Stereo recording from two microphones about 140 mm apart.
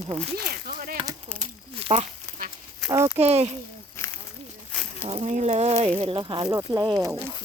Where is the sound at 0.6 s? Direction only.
90° right.